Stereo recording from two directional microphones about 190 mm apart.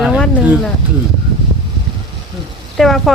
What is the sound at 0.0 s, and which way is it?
Speech, 5° right (ahead or behind).